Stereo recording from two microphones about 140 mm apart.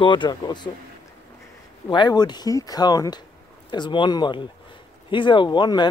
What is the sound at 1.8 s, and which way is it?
Speech, 30° left (ahead or behind).